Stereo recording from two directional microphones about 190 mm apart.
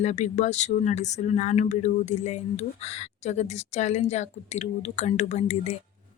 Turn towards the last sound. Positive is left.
turn(degrees=35)  # may be behind; listen again after turning